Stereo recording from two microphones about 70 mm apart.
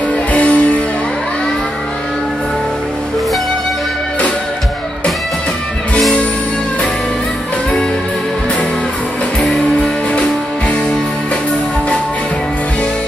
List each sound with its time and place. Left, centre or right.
0.3 s music: centre
9.4 s music: centre